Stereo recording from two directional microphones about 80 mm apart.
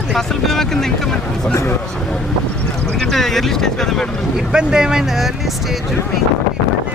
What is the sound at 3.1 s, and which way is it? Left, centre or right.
Speech, centre.